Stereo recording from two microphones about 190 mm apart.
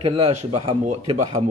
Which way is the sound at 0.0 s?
35° right (ahead or behind).